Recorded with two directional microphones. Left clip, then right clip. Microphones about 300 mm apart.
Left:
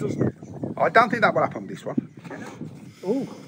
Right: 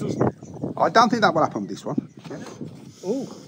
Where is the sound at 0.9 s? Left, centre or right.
Centre.